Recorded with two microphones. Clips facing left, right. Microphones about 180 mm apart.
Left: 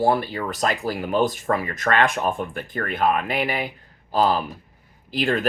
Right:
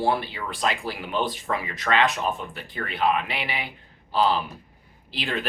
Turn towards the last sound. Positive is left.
turn(degrees=45)  # may be behind; listen again after turning